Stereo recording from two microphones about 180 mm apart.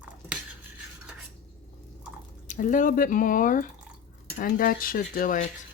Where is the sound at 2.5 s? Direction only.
45° left (ahead or behind).